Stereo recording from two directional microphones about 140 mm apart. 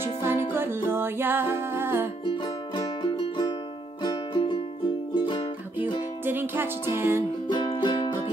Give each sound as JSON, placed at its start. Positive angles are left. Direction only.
{"t": 0.0, "sound": "music", "side_deg": -15}
{"t": 2.2, "sound": "music", "side_deg": 35}
{"t": 6.2, "sound": "music", "side_deg": -15}
{"t": 7.4, "sound": "music", "side_deg": 35}